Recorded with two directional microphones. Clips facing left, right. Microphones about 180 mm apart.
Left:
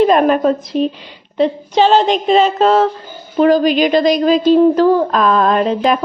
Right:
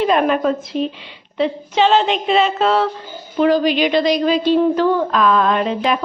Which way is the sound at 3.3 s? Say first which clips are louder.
Left 4 dB; 45° left (ahead or behind).